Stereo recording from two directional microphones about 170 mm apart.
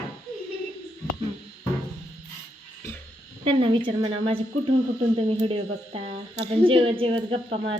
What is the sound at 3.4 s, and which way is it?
Speech, 30° right (ahead or behind).